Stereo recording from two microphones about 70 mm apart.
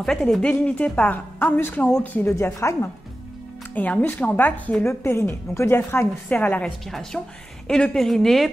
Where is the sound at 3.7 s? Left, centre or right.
Left.